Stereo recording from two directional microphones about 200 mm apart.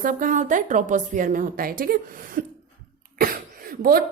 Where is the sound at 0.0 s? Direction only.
40° right (ahead or behind).